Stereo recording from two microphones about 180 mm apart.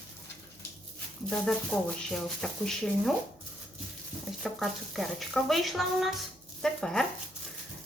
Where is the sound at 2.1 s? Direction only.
5° left (ahead or behind).